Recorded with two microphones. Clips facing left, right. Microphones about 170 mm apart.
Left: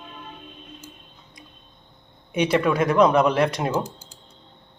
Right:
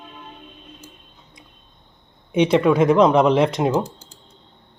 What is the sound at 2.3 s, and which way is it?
Speech, 25° right (ahead or behind).